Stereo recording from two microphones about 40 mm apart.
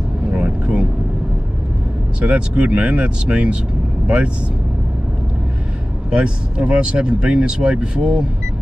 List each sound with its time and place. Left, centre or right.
0.3 s vehicle: right
2.1 s speech: right
6.0 s speech: right